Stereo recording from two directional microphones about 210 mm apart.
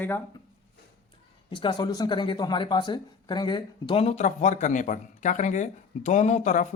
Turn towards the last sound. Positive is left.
turn(degrees=35)  # may be behind; listen again after turning